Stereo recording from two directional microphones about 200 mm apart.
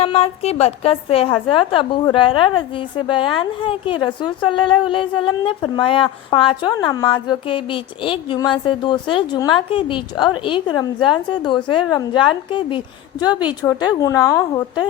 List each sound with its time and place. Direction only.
0.0 s a woman's voice: 30° left (ahead or behind)